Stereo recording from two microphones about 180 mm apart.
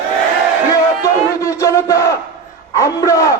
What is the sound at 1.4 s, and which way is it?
Crowd, 15° left (ahead or behind).